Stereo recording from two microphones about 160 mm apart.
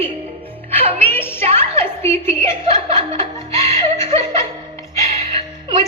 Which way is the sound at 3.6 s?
30° right (ahead or behind).